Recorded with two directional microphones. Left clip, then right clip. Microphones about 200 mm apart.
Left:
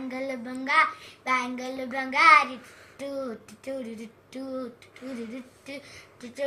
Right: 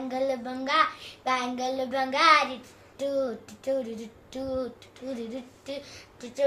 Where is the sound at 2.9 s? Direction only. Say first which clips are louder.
Right 6 dB; 15° right (ahead or behind).